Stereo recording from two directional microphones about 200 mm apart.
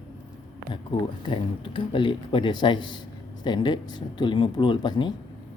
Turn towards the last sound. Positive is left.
turn(degrees=20)  # may be behind; listen again after turning